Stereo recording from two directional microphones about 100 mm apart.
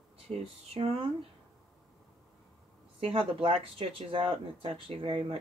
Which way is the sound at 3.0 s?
65° right (ahead or behind).